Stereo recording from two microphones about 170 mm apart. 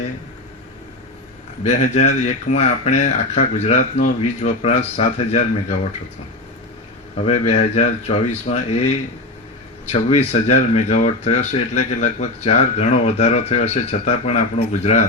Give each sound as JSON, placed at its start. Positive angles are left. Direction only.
{"t": 1.6, "sound": "speech", "side_deg": 45}
{"t": 7.3, "sound": "speech", "side_deg": 40}
{"t": 9.8, "sound": "speech", "side_deg": 40}